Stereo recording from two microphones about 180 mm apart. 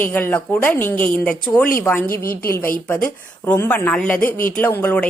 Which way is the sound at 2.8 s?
10° left (ahead or behind).